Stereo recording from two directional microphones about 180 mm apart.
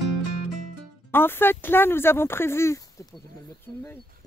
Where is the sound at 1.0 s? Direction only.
10° left (ahead or behind).